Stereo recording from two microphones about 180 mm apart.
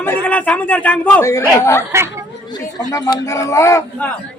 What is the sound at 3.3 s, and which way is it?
Speech, 15° left (ahead or behind).